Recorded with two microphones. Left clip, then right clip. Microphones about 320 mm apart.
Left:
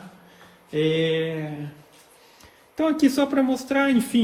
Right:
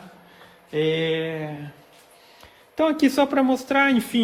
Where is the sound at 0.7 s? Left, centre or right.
Right.